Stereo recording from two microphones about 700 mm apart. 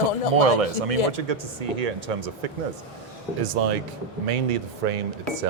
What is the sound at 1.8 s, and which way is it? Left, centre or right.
Speech, right.